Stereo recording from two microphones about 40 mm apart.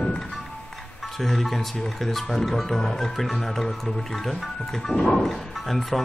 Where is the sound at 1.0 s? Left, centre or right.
Centre.